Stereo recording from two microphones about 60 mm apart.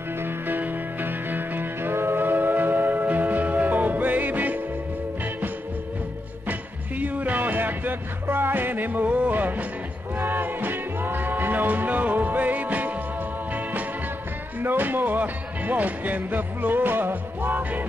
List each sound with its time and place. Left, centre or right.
0.2 s music: right
7.0 s music: right
14.6 s music: right